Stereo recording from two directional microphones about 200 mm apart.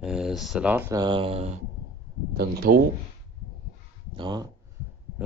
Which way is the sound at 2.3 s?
50° right (ahead or behind).